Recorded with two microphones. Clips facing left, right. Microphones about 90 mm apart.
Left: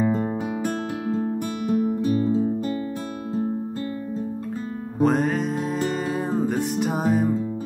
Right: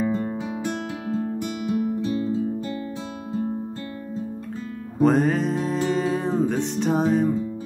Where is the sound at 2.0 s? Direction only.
45° left (ahead or behind).